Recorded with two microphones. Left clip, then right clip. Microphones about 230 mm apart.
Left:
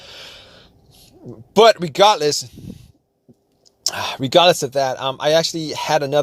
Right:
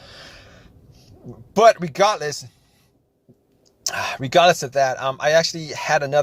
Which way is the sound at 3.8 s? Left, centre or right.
Left.